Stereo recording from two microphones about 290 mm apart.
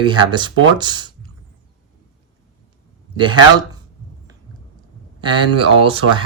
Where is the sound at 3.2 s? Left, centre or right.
Centre.